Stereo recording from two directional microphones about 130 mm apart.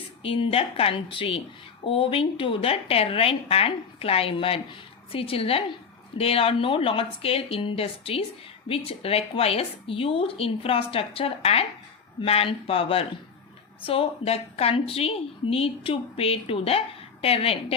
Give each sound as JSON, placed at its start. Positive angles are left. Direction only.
{"t": 0.2, "sound": "a woman's voice", "side_deg": 45}